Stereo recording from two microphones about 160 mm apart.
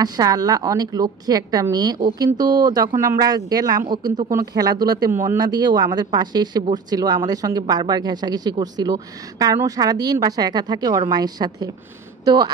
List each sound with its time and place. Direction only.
0.0 s speech: 25° right (ahead or behind)